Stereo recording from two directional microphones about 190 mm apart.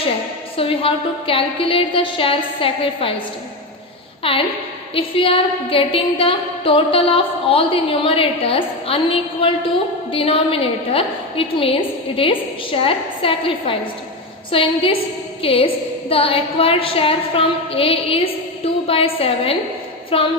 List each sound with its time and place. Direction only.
0.5 s a woman's voice: 30° left (ahead or behind)
4.2 s a woman's voice: 30° left (ahead or behind)